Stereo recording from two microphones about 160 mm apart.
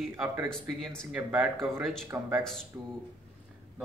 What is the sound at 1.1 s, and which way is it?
Speech, 10° right (ahead or behind).